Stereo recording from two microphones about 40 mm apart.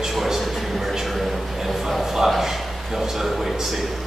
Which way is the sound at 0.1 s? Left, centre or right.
Centre.